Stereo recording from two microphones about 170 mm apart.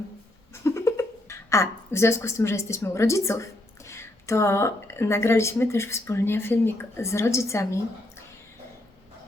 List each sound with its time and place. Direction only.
0.5 s speech: 15° left (ahead or behind)